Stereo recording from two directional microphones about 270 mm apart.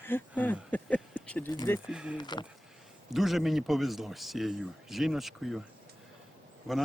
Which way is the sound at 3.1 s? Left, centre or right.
Centre.